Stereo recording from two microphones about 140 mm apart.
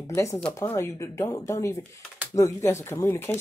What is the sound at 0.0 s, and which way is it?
Speech, 20° left (ahead or behind).